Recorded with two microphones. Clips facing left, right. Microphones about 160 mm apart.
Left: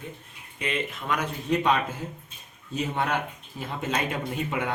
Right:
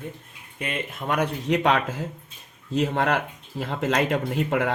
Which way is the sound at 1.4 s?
80° right.